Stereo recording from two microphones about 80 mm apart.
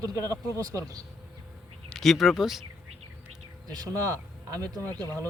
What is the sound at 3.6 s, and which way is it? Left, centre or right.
Speech, right.